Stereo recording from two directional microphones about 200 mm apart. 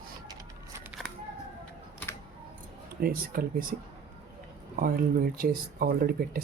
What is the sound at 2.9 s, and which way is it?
Speech, 50° right (ahead or behind).